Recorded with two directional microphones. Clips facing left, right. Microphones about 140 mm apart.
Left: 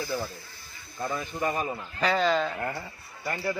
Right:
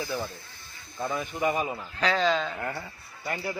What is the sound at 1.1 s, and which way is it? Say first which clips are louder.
Speech: right 2 dB; 10° right (ahead or behind).